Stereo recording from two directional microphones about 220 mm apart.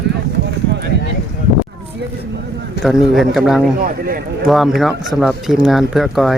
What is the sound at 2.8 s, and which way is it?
Speech, centre (ahead or behind).